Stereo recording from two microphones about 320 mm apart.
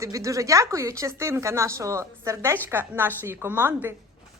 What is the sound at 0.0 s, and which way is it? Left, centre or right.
A woman's voice, centre.